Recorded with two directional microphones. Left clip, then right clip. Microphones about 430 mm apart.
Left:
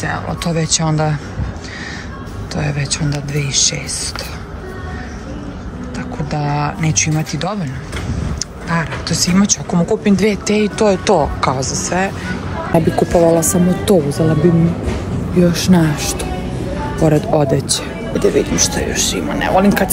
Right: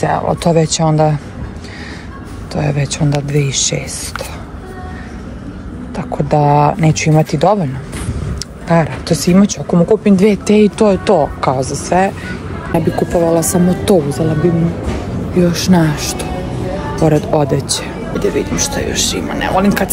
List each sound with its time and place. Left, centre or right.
0.0 s speech: centre
2.5 s speech: centre
5.9 s speech: centre
15.3 s speech: centre